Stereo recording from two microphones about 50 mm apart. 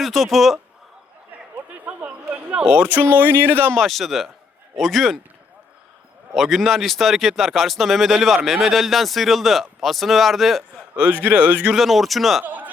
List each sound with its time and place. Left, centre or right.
0.0 s speech: centre
1.8 s a sound: right
2.6 s speech: right
3.8 s speech: centre
6.3 s speech: centre
11.2 s speech: right
11.7 s speech: centre
12.5 s a sound: right